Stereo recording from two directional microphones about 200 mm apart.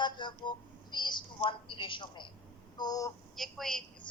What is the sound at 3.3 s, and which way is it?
Speech, centre (ahead or behind).